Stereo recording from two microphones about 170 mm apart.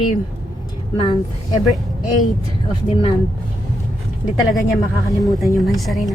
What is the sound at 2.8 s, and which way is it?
Speech, 35° left (ahead or behind).